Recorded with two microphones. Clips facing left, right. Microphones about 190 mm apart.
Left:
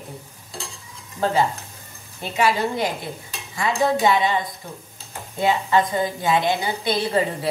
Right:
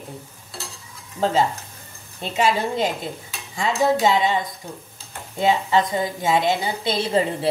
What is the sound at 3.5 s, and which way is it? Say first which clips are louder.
Speech: right 1 dB; 20° right (ahead or behind).